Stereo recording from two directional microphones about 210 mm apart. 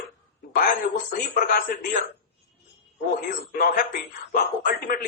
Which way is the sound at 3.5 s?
45° left (ahead or behind).